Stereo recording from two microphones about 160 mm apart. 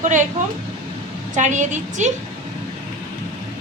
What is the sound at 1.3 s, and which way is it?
Speech, 50° right (ahead or behind).